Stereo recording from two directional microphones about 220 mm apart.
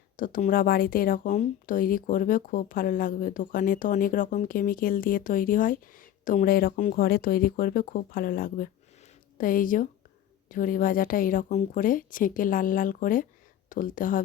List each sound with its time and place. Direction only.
0.2 s speech: 40° left (ahead or behind)